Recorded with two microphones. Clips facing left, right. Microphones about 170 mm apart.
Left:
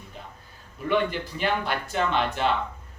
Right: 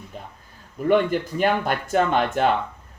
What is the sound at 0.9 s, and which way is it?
Speech, 50° right (ahead or behind).